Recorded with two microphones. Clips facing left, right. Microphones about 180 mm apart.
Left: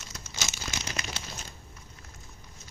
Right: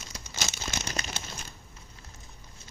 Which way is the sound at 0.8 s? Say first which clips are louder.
Right 1 dB; 45° right (ahead or behind).